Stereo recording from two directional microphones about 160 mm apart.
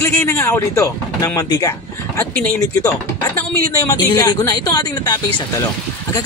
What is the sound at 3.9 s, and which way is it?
Speech, 20° left (ahead or behind).